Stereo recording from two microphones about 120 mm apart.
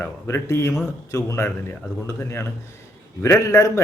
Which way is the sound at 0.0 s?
20° left (ahead or behind).